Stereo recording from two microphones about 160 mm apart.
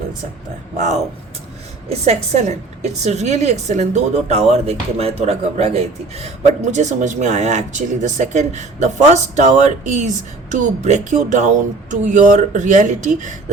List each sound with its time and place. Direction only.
1.9 s a woman's voice: 45° right (ahead or behind)